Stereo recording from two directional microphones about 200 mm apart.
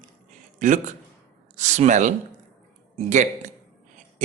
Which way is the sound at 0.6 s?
40° right (ahead or behind).